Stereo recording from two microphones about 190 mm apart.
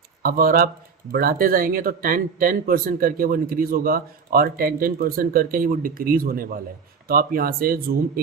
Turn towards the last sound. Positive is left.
turn(degrees=-50)  # may be behind; listen again after turning